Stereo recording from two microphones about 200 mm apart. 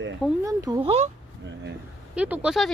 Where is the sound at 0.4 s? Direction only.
15° right (ahead or behind).